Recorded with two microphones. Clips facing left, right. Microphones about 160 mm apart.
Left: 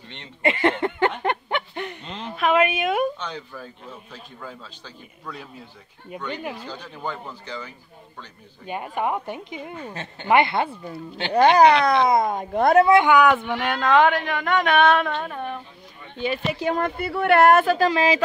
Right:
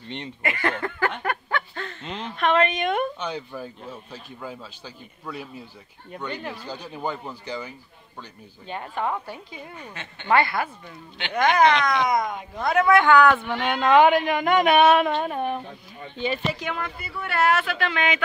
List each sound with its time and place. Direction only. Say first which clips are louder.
0.4 s speech: left 7 dB; 25° left (ahead or behind)
1.2 s chuckle: left 3 dB; 20° left (ahead or behind)
2.0 s a woman's voice: even; centre (ahead or behind)
3.2 s a man's voice: right 3 dB; 10° right (ahead or behind)
6.7 s a man's voice: right 2 dB; 10° right (ahead or behind)
8.6 s speech: left 2 dB; 15° left (ahead or behind)
9.8 s speech: left 5 dB; 35° left (ahead or behind)
10.2 s speech: left 2 dB; 20° left (ahead or behind)
13.7 s a man's voice: right 2 dB; 5° right (ahead or behind)
15.1 s a sound: right 4 dB; 20° right (ahead or behind)
16.5 s speech: left 7 dB; 35° left (ahead or behind)
16.8 s speech: left 10 dB; 55° left (ahead or behind); by 18.2 s 35° left (ahead or behind)